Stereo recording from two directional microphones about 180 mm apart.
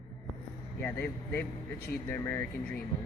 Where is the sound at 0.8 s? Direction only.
10° left (ahead or behind).